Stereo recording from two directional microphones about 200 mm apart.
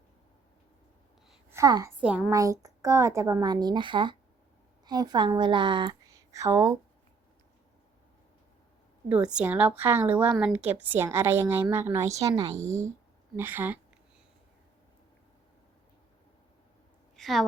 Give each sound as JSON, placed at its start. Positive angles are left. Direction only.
{"t": 1.5, "sound": "a woman's voice", "side_deg": -15}
{"t": 2.0, "sound": "a woman's voice", "side_deg": -5}
{"t": 2.3, "sound": "a woman's voice", "side_deg": -15}
{"t": 9.0, "sound": "a woman's voice", "side_deg": -5}
{"t": 13.3, "sound": "a woman's voice", "side_deg": -10}
{"t": 17.2, "sound": "a woman's voice", "side_deg": 0}